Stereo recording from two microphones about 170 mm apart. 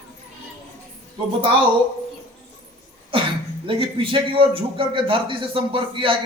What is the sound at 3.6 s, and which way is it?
A man's voice, 30° right (ahead or behind).